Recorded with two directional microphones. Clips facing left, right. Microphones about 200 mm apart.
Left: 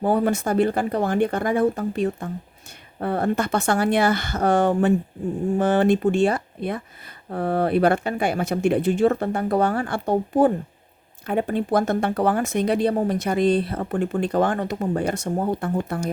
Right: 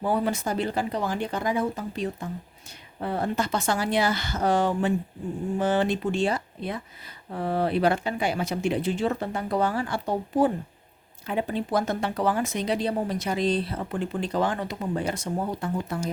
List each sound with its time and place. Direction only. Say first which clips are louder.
0.0 s speech: left 5 dB; 50° left (ahead or behind)